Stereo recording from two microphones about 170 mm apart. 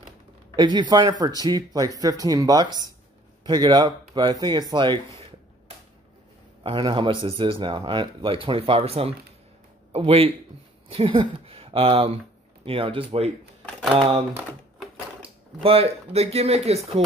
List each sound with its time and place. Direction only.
0.6 s speech: 25° right (ahead or behind)
6.6 s speech: 30° right (ahead or behind)
15.6 s speech: 35° right (ahead or behind)